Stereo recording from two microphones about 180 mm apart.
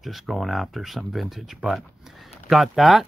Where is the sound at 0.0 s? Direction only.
Centre (ahead or behind).